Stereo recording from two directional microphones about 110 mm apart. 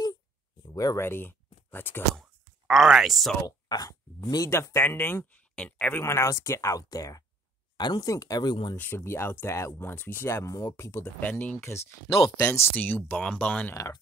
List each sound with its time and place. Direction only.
0.7 s speech: 30° left (ahead or behind)
2.1 s speech: centre (ahead or behind)
3.4 s speech: 35° left (ahead or behind)
4.5 s speech: 25° left (ahead or behind)
6.0 s speech: 25° left (ahead or behind)
8.7 s speech: 20° left (ahead or behind)
11.1 s speech: 15° left (ahead or behind)